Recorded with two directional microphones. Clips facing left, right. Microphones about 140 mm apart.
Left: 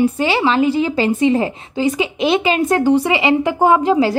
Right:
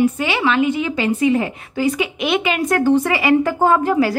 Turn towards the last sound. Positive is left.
turn(degrees=20)  # may be behind; listen again after turning